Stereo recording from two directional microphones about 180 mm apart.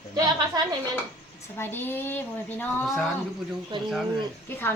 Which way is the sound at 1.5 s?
10° left (ahead or behind).